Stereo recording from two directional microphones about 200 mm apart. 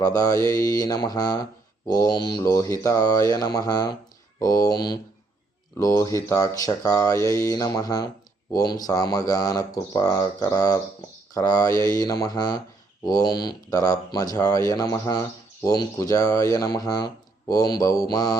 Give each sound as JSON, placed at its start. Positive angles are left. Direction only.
{"t": 0.0, "sound": "speech", "side_deg": 20}